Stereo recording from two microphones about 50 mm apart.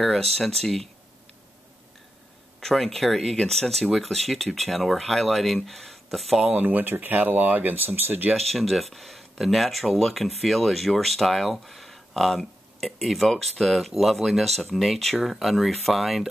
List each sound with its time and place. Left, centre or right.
0.0 s speech: centre
2.6 s speech: centre
6.4 s speech: right
8.5 s speech: centre